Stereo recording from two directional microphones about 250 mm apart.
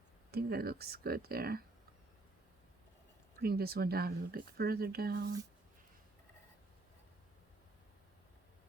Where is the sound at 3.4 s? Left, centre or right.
Right.